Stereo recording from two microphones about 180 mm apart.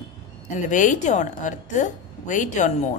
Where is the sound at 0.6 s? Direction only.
45° left (ahead or behind).